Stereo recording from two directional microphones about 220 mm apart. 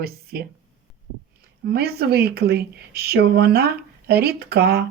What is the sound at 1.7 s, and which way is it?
Speech, 45° right (ahead or behind).